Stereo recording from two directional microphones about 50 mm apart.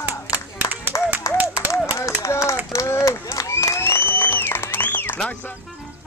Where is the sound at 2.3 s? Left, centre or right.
Left.